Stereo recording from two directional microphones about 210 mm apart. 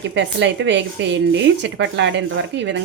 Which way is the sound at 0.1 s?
60° right (ahead or behind).